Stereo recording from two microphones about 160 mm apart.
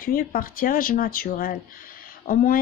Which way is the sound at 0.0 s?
65° left (ahead or behind).